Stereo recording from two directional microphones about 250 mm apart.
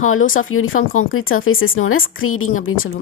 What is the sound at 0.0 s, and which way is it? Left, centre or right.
Speech, left.